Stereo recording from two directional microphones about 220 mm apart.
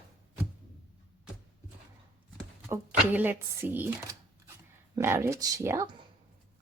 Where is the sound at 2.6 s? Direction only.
10° right (ahead or behind).